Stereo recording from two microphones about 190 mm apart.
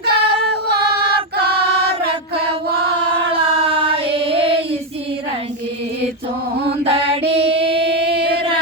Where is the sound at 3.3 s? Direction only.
30° right (ahead or behind).